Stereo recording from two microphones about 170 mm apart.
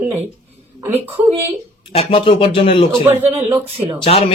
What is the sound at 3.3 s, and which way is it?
Speech, 15° right (ahead or behind).